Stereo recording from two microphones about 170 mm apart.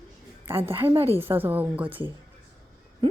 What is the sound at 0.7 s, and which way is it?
Speech, 15° right (ahead or behind).